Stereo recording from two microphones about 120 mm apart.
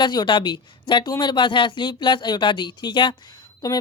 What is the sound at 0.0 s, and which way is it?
Speech, 40° left (ahead or behind).